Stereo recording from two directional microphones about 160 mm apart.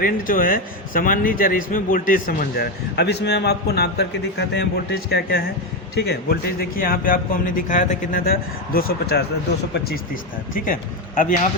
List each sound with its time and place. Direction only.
0.0 s a man's voice: 60° left (ahead or behind); by 5.4 s 75° left (ahead or behind)
5.9 s a man's voice: 90° left; by 10.0 s 75° left (ahead or behind)